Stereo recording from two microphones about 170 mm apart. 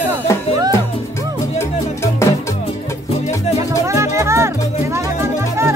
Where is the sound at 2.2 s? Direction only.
15° left (ahead or behind).